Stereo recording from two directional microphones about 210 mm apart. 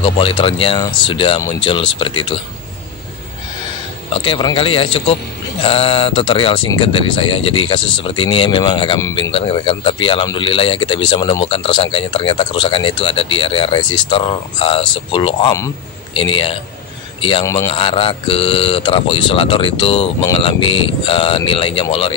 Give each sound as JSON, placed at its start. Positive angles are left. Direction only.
{"t": 0.0, "sound": "speech", "side_deg": 25}
{"t": 4.1, "sound": "a man's voice", "side_deg": 25}
{"t": 17.7, "sound": "speech", "side_deg": 25}